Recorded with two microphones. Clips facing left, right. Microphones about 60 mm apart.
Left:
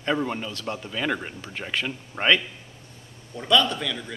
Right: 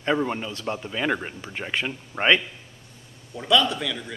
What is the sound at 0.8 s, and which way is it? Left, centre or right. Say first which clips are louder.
Speech: right 2 dB; centre.